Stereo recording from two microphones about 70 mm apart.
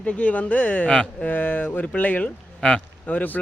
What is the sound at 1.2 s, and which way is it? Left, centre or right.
Speech, left.